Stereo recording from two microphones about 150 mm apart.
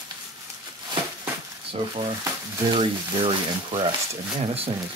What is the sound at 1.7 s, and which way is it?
Speech, 40° right (ahead or behind).